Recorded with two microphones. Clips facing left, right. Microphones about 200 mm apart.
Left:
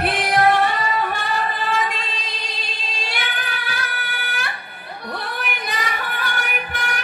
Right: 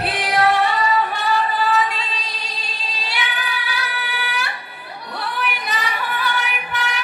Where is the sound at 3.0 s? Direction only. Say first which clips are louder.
Right 2 dB; 50° left (ahead or behind).